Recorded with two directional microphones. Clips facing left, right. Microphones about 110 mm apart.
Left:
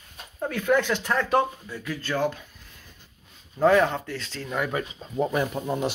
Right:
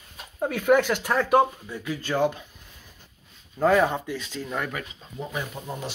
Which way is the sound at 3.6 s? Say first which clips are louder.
Left 1 dB; 5° right (ahead or behind).